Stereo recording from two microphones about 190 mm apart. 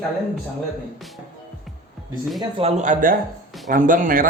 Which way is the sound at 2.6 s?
35° right (ahead or behind).